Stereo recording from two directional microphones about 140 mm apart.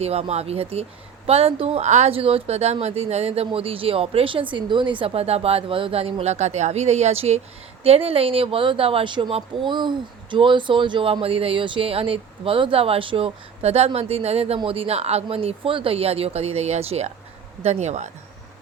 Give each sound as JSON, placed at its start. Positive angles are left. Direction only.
{"t": 0.0, "sound": "a woman's voice", "side_deg": -50}